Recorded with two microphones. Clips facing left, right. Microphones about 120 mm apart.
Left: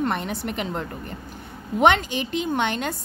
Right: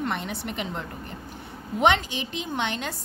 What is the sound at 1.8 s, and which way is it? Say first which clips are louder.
A woman's voice: left 3 dB; 55° left (ahead or behind).